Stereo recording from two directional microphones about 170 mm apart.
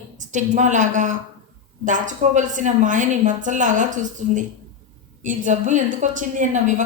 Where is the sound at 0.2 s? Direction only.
45° right (ahead or behind).